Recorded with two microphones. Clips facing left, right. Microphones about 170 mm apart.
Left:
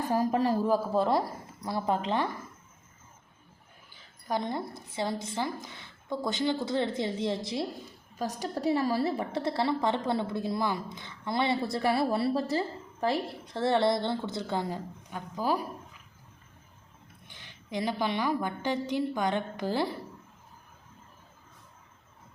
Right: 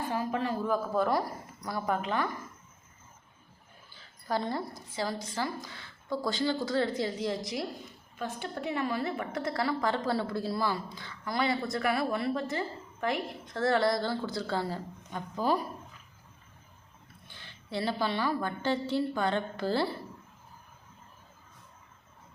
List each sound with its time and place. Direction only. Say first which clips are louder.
0.1 s a woman's voice: left 7 dB; 40° left (ahead or behind)
4.3 s a woman's voice: even; 20° left (ahead or behind)
17.2 s a woman's voice: even; 15° left (ahead or behind)